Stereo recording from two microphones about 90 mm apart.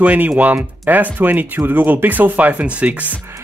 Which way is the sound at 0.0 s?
15° right (ahead or behind).